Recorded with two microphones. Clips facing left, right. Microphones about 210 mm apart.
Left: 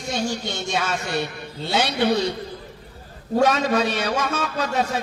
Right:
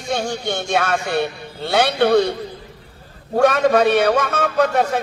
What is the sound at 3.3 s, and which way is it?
A man's voice, 60° right (ahead or behind).